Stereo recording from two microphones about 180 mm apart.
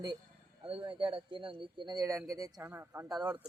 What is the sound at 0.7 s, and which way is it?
Speech, 30° right (ahead or behind).